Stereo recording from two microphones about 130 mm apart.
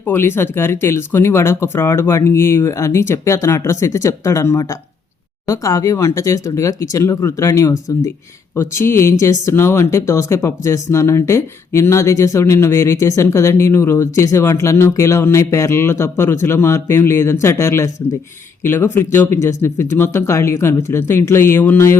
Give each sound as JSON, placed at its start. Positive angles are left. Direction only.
{"t": 0.0, "sound": "speech", "side_deg": 15}